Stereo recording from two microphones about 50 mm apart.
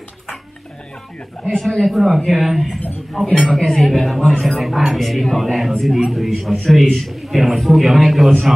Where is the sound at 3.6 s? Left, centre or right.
Centre.